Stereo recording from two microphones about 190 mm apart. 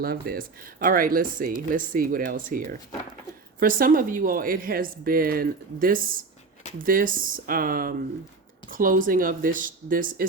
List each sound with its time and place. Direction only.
0.0 s speech: 50° right (ahead or behind)